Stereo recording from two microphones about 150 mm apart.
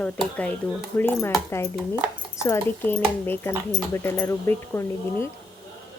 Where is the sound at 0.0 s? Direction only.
10° left (ahead or behind).